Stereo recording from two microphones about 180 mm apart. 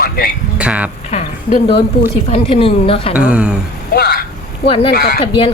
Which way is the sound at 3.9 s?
60° left (ahead or behind).